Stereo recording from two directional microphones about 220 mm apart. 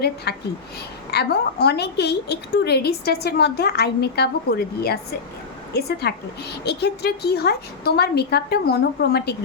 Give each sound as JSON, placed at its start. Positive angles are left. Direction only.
{"t": 0.3, "sound": "a woman's voice", "side_deg": 45}